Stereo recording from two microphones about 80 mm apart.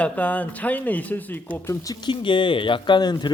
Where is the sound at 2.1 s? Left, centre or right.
Left.